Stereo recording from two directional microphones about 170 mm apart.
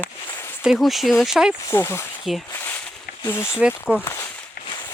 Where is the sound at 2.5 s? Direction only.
15° left (ahead or behind).